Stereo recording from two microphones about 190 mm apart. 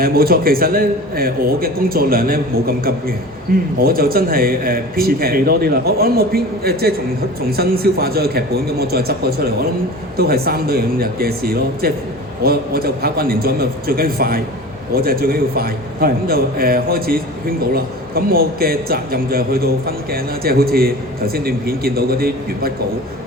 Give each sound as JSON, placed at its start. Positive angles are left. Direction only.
{"t": 0.0, "sound": "a man's voice", "side_deg": -50}